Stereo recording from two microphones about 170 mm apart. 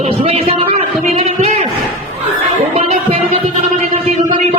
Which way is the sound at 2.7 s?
40° right (ahead or behind).